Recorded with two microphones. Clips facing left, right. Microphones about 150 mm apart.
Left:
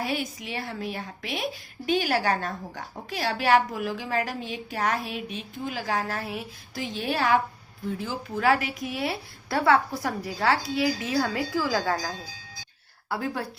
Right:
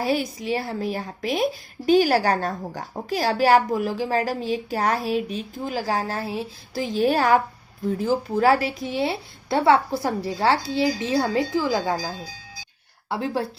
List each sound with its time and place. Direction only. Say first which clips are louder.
0.0 s a woman's voice: right 6 dB; 35° right (ahead or behind)